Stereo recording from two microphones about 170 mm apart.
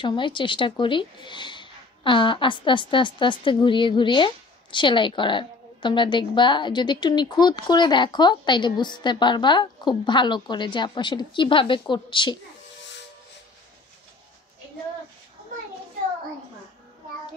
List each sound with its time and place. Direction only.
0.0 s speech: 30° left (ahead or behind)